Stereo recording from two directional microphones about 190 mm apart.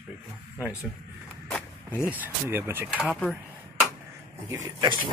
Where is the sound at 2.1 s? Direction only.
10° right (ahead or behind).